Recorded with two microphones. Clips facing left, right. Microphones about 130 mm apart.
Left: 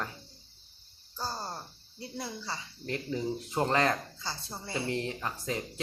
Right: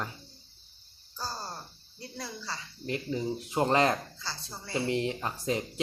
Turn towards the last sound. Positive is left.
turn(degrees=-20)  # may be behind; listen again after turning